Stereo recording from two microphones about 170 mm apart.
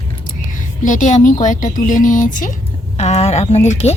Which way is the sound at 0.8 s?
50° left (ahead or behind).